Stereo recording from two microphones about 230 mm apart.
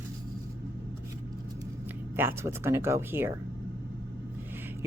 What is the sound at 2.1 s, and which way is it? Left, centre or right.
Speech, centre.